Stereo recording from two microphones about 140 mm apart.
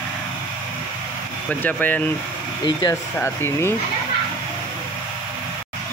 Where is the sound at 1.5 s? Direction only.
10° left (ahead or behind).